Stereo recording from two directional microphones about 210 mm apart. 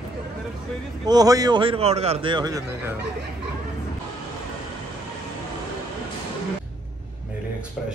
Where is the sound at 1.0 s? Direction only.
20° right (ahead or behind).